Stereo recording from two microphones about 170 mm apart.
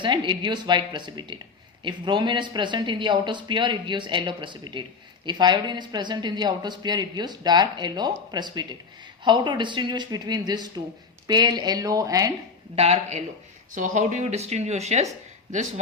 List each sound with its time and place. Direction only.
0.0 s speech: 30° right (ahead or behind)
12.7 s speech: 35° right (ahead or behind)
13.7 s speech: 50° right (ahead or behind)